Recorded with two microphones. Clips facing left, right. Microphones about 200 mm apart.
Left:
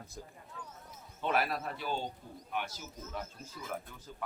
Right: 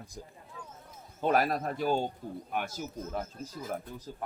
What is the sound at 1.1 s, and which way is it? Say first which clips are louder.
A man's voice: right 5 dB; 40° right (ahead or behind).